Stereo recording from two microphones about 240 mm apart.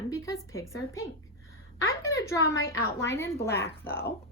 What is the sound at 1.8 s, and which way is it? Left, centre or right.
Speech, centre.